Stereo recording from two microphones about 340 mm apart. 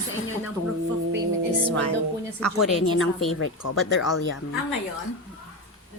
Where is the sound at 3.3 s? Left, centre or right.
Left.